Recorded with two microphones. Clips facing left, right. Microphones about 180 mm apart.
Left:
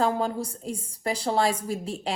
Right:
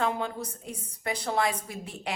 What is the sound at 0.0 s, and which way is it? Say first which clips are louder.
A woman's voice: left 4 dB; 35° left (ahead or behind).